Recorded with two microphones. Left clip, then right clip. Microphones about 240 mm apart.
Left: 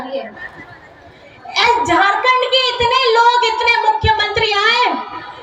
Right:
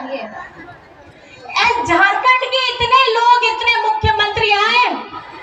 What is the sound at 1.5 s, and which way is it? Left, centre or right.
A woman's voice, left.